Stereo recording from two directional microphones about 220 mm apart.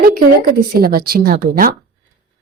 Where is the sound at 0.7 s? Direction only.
40° right (ahead or behind).